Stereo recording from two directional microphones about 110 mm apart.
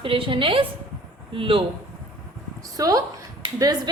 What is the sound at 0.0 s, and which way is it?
A woman's voice, 55° right (ahead or behind).